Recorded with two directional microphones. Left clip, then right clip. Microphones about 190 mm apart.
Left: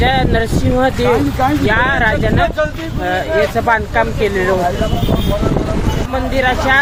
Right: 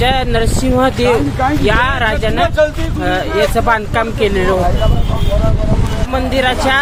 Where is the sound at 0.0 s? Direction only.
5° right (ahead or behind).